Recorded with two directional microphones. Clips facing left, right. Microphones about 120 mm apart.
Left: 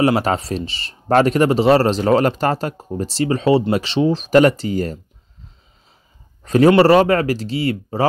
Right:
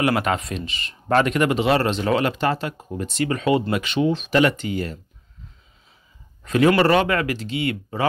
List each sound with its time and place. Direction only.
0.0 s speech: 35° left (ahead or behind)
6.4 s speech: 35° left (ahead or behind)